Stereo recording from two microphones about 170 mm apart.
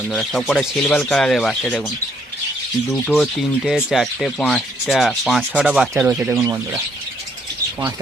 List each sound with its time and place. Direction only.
0.1 s rub: centre (ahead or behind)
2.9 s rub: centre (ahead or behind)
6.4 s speech: 20° right (ahead or behind)